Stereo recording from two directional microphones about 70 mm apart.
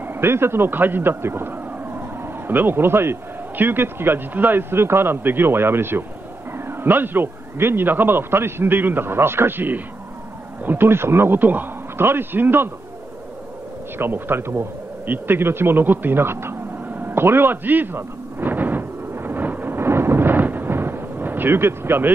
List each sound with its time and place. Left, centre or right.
0.0 s a man's voice: right
13.9 s bee: right